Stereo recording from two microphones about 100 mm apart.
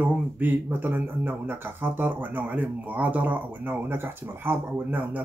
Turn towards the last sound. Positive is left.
turn(degrees=-20)  # may be behind; listen again after turning